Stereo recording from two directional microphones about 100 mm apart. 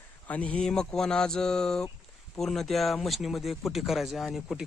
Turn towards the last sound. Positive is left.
turn(degrees=0)  # may be behind; listen again after turning